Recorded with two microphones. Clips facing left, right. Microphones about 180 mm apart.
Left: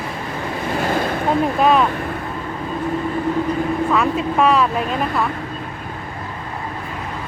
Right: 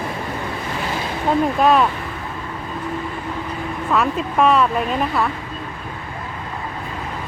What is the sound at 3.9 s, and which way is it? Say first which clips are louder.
Speech: right 3 dB; centre (ahead or behind).